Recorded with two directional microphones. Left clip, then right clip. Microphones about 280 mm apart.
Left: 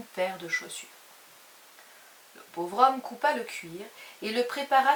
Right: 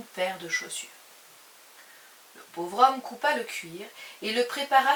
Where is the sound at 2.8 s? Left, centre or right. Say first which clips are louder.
Right 1 dB; centre.